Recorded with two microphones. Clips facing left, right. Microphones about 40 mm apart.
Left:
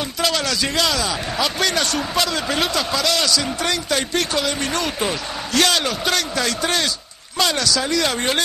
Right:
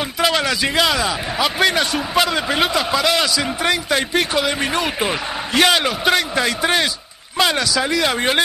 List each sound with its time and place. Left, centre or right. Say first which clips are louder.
0.2 s a man's voice: right 3 dB; centre